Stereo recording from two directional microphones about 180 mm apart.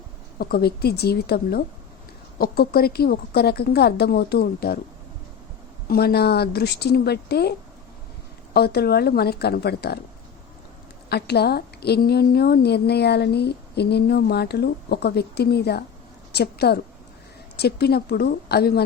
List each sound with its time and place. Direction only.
0.3 s a woman's voice: 55° left (ahead or behind)
5.9 s a woman's voice: 60° left (ahead or behind)
8.5 s a woman's voice: 60° left (ahead or behind)
11.1 s a woman's voice: 65° left (ahead or behind)